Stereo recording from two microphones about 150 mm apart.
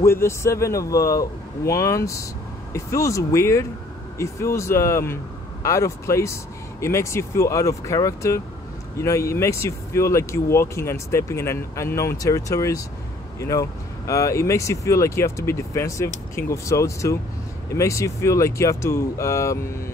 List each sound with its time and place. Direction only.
0.0 s speech: 15° left (ahead or behind)